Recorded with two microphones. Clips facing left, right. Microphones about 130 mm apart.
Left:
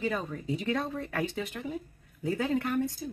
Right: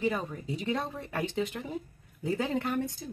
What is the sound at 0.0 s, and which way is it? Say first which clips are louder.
Speech: right 1 dB; 15° right (ahead or behind).